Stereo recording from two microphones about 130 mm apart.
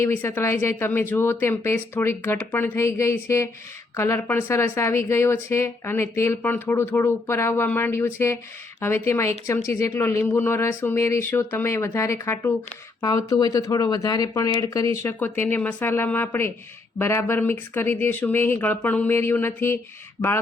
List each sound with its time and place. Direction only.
0.0 s a woman's voice: 20° left (ahead or behind)
15.0 s speech: 15° left (ahead or behind)